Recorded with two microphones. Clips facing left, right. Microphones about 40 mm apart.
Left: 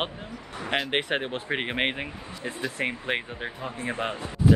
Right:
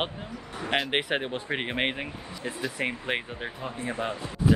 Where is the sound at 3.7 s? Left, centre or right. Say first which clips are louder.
Left 1 dB; left.